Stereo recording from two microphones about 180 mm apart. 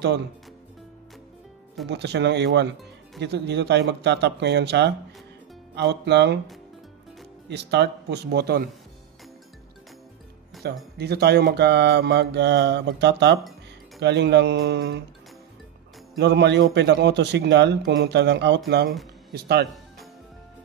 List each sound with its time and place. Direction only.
1.9 s mantra: 70° right (ahead or behind)
7.4 s mantra: 70° right (ahead or behind)
10.6 s speech: 65° right (ahead or behind)
11.0 s mantra: 65° right (ahead or behind)
16.2 s mantra: 70° right (ahead or behind)
19.3 s speech: 60° right (ahead or behind)